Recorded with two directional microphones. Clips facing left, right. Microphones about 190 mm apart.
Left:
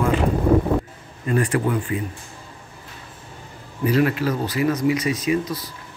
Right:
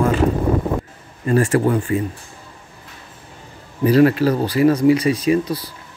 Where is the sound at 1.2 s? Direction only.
45° right (ahead or behind).